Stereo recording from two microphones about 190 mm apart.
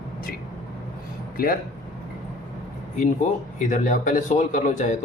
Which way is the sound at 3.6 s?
40° left (ahead or behind).